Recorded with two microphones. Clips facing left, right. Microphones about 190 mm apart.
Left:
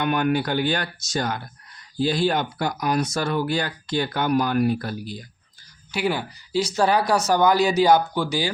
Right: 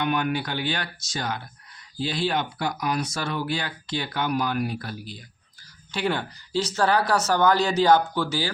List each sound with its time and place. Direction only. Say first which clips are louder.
0.0 s speech: left 4 dB; 50° left (ahead or behind)
5.9 s speech: left 2 dB; 10° left (ahead or behind)